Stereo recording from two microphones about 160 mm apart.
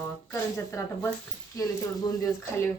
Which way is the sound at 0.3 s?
15° left (ahead or behind).